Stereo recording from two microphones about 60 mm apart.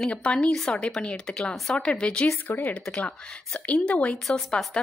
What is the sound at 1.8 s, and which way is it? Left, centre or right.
Speech, centre.